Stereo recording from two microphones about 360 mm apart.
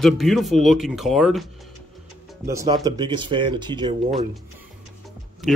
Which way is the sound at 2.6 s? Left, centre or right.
Centre.